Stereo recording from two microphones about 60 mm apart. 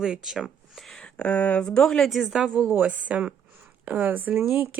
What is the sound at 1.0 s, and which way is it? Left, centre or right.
Speech, left.